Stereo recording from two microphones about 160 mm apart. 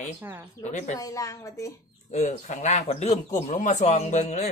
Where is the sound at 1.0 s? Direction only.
20° left (ahead or behind).